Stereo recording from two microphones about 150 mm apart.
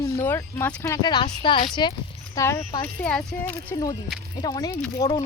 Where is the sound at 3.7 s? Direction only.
25° left (ahead or behind).